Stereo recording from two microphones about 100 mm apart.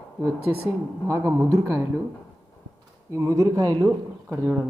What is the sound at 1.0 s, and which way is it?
Speech, 30° right (ahead or behind).